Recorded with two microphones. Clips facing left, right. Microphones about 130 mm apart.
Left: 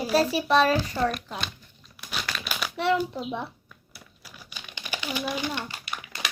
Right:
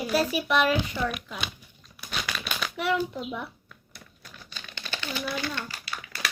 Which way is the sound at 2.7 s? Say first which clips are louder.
Left 3 dB; 30° left (ahead or behind).